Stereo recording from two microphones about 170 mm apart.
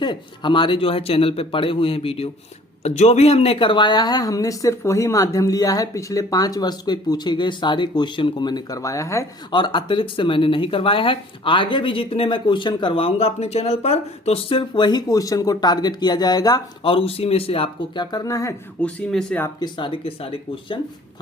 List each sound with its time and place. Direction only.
0.0 s a man's voice: 25° left (ahead or behind)
18.8 s speech: 5° left (ahead or behind)
19.5 s speech: 25° left (ahead or behind)